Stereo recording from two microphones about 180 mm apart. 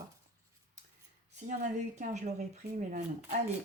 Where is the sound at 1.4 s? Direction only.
40° right (ahead or behind).